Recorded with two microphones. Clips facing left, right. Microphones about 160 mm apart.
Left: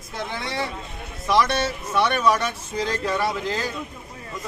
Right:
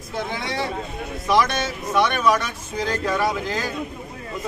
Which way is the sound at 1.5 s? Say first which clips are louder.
Even; 35° left (ahead or behind).